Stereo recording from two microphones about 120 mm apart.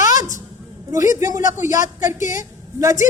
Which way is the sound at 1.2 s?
30° right (ahead or behind).